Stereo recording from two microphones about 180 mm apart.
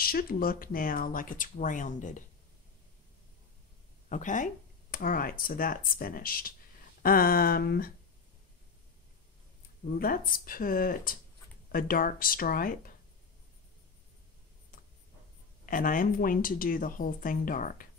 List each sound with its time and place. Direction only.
0.0 s speech: 55° left (ahead or behind)
4.1 s speech: 45° left (ahead or behind)
9.9 s speech: 55° left (ahead or behind)
15.6 s speech: 50° left (ahead or behind)